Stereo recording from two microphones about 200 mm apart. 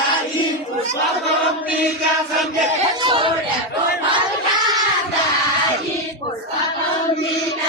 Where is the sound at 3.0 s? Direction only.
25° right (ahead or behind).